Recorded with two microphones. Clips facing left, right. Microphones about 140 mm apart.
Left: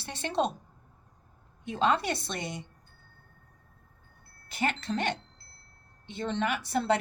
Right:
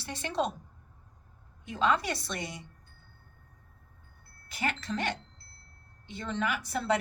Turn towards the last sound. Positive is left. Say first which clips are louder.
# left 2 dB
turn(degrees=30)  # may be behind; listen again after turning